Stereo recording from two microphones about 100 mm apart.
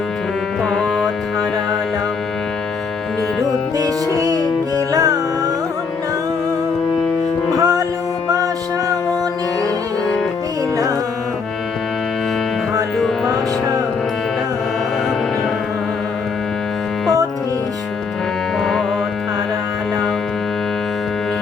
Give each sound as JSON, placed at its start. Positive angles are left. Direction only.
{"t": 0.6, "sound": "music", "side_deg": 5}
{"t": 3.8, "sound": "music", "side_deg": -35}
{"t": 7.5, "sound": "music", "side_deg": -35}
{"t": 18.6, "sound": "music", "side_deg": 5}